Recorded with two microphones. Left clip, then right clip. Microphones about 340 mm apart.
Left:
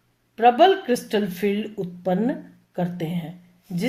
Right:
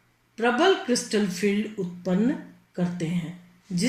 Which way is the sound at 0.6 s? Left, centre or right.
Left.